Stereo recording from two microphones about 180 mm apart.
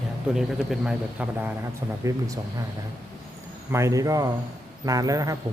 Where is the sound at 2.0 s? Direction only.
20° right (ahead or behind).